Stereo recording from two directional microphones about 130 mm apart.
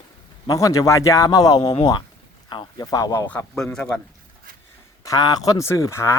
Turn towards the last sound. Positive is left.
turn(degrees=20)  # may be behind; listen again after turning